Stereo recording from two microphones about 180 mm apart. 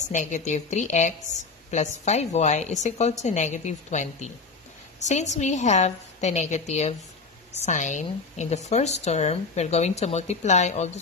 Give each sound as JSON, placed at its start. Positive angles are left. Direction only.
{"t": 0.1, "sound": "a woman's voice", "side_deg": 45}